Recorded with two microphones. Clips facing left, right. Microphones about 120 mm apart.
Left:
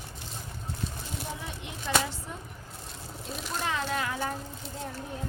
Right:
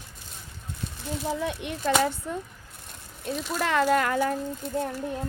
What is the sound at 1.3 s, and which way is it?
Speech, 70° right (ahead or behind).